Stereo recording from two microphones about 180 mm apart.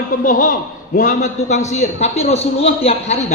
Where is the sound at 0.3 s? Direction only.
45° left (ahead or behind).